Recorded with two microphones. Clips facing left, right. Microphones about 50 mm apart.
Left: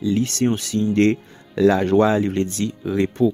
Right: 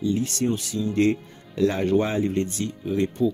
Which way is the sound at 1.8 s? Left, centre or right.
Left.